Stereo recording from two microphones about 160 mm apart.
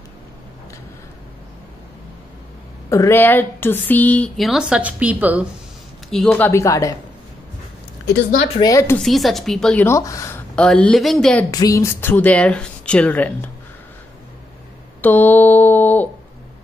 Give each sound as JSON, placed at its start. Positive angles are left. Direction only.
{"t": 2.9, "sound": "speech", "side_deg": 15}
{"t": 6.0, "sound": "speech", "side_deg": 0}
{"t": 8.5, "sound": "speech", "side_deg": 20}
{"t": 8.9, "sound": "speech", "side_deg": 0}
{"t": 9.8, "sound": "speech", "side_deg": 20}
{"t": 10.5, "sound": "speech", "side_deg": 5}
{"t": 11.5, "sound": "speech", "side_deg": 20}
{"t": 15.0, "sound": "mantra", "side_deg": 10}